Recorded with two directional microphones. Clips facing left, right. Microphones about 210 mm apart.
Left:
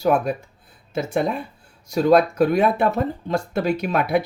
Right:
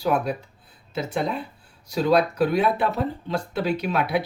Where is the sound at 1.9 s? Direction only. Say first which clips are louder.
Left 4 dB; 45° left (ahead or behind).